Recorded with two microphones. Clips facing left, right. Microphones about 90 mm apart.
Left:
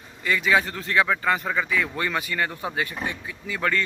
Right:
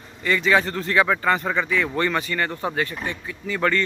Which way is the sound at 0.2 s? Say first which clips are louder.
Right 2 dB; 5° left (ahead or behind).